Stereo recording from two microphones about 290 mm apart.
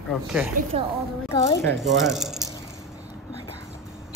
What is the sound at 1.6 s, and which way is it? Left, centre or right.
Speech, centre.